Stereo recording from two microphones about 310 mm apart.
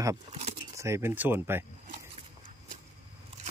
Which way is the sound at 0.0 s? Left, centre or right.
Centre.